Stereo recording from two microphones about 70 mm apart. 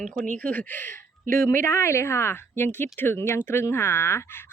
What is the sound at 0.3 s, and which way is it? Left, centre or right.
A woman's voice, left.